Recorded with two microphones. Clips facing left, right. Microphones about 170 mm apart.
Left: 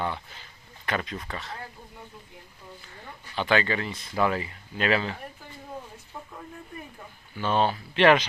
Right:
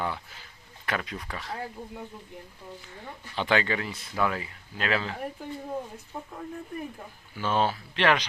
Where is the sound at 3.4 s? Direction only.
15° right (ahead or behind); by 5.1 s centre (ahead or behind).